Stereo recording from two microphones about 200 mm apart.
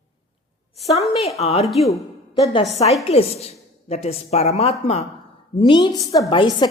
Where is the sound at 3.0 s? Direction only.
30° left (ahead or behind).